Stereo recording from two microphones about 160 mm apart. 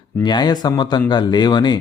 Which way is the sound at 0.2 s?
25° left (ahead or behind).